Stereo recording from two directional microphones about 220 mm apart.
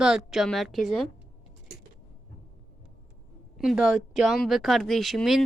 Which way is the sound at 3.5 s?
5° right (ahead or behind).